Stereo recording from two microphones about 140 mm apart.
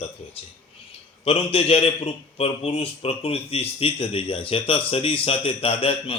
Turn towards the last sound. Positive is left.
turn(degrees=45)  # may be behind; listen again after turning